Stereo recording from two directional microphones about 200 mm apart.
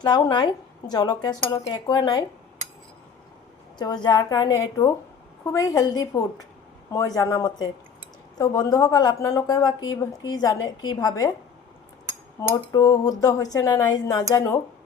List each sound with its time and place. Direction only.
0.0 s speech: 20° left (ahead or behind)
3.8 s speech: 20° left (ahead or behind)
12.4 s speech: 15° left (ahead or behind)